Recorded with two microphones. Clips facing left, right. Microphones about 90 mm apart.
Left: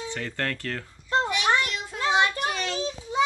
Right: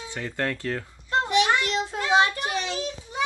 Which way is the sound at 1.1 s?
30° left (ahead or behind).